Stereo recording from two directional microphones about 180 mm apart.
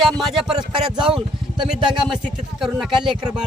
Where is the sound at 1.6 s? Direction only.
Centre (ahead or behind).